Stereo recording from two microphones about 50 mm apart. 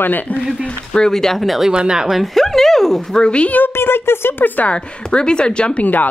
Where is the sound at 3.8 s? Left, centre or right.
Left.